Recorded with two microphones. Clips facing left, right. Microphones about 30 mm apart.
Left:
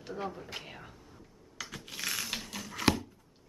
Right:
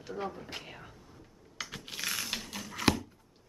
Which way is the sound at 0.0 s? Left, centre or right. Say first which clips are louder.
Even; centre.